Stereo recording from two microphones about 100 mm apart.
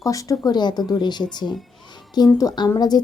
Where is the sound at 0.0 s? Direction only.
35° left (ahead or behind).